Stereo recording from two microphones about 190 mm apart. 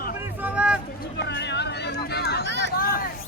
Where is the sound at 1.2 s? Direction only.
65° left (ahead or behind).